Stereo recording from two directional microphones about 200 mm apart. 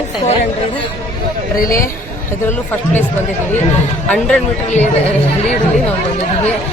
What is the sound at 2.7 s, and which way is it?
Speech, 10° left (ahead or behind).